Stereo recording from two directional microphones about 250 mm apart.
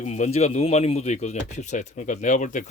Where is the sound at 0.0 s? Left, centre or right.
Left.